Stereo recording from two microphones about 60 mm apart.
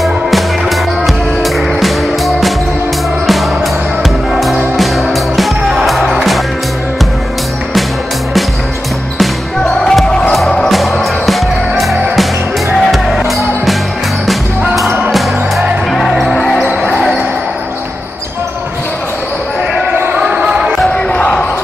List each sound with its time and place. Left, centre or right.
0.0 s music: centre
4.0 s music: centre
9.6 s music: centre
10.7 s music: centre
15.0 s music: centre
16.6 s basketball bounce: right
20.2 s basketball bounce: right
20.4 s basketball bounce: centre
20.8 s basketball bounce: centre